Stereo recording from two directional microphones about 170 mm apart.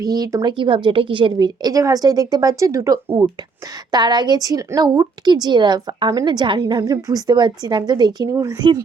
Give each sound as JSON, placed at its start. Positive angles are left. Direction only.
{"t": 0.0, "sound": "a woman's voice", "side_deg": -20}